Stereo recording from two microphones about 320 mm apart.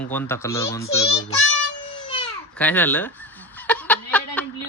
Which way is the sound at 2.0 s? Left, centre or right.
Centre.